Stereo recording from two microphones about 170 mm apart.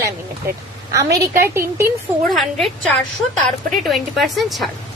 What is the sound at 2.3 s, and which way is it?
Speech, centre (ahead or behind).